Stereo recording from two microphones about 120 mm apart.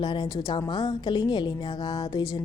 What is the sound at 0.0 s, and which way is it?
Speech, 40° left (ahead or behind).